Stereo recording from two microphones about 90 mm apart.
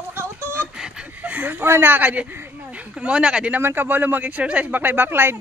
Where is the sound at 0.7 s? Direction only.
10° right (ahead or behind).